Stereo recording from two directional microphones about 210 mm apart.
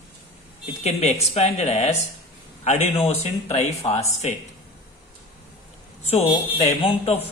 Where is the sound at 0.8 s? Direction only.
30° left (ahead or behind).